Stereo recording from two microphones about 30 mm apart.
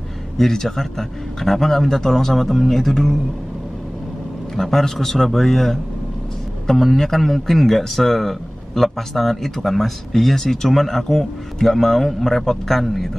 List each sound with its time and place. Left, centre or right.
0.4 s a man's voice: centre
4.6 s a man's voice: centre